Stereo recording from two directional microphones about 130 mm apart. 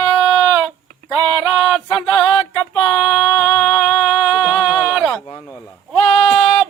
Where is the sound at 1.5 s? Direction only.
10° left (ahead or behind).